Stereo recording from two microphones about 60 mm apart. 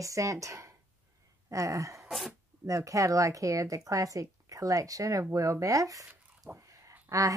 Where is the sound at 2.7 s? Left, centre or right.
Right.